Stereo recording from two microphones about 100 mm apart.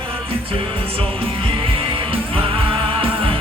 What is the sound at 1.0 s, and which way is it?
Music, 65° right (ahead or behind).